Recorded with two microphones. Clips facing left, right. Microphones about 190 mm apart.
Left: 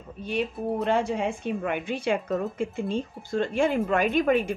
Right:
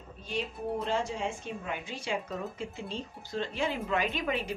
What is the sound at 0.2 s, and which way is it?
A woman's voice, 60° left (ahead or behind).